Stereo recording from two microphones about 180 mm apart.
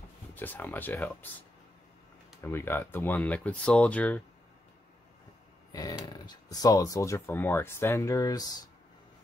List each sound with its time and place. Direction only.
0.3 s speech: 10° left (ahead or behind)
2.4 s speech: 15° left (ahead or behind)
5.7 s a sound: 20° left (ahead or behind)
6.0 s speech: 25° left (ahead or behind)